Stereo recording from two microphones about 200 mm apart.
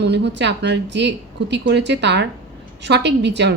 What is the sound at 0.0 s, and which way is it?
A woman's voice, 60° right (ahead or behind).